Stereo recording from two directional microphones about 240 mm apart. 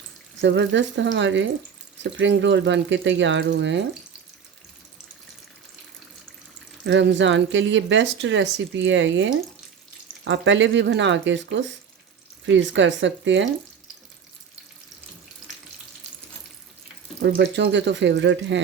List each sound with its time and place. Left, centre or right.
0.4 s speech: right
6.8 s speech: right
17.2 s speech: right